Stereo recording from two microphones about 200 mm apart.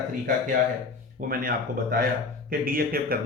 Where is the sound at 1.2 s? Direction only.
45° right (ahead or behind).